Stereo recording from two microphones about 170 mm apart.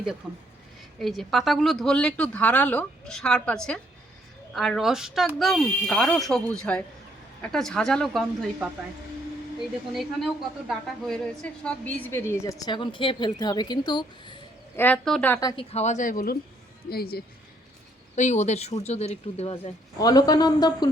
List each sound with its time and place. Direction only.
0.2 s speech: 5° right (ahead or behind)
9.9 s speech: centre (ahead or behind)
12.3 s speech: 20° left (ahead or behind)
14.8 s a woman's voice: 10° left (ahead or behind)
15.4 s speech: 20° left (ahead or behind)
15.7 s speech: 40° left (ahead or behind); by 17.2 s 65° left (ahead or behind)
18.2 s speech: 45° left (ahead or behind)
20.0 s speech: 20° left (ahead or behind)